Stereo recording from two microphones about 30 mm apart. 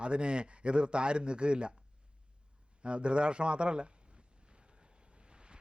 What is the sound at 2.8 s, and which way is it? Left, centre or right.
A man's voice, right.